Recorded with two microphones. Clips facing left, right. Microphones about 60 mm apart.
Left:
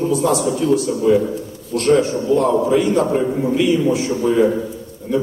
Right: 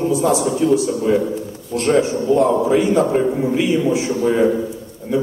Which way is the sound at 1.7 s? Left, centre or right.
Right.